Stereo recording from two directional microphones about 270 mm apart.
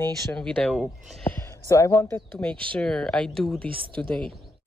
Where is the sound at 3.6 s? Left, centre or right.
Centre.